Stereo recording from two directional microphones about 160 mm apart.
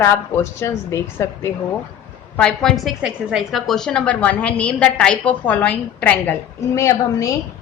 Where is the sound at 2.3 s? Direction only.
5° left (ahead or behind).